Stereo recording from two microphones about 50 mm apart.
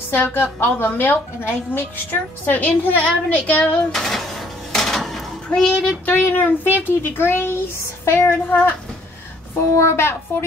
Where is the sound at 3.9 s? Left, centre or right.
Centre.